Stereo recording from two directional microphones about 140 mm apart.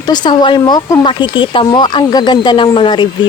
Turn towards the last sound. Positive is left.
turn(degrees=35)  # may be behind; listen again after turning